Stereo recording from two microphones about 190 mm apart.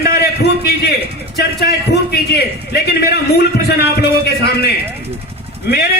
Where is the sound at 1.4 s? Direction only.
60° left (ahead or behind).